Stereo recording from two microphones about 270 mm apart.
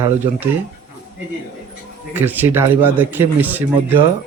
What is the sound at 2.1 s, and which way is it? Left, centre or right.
Speech, centre.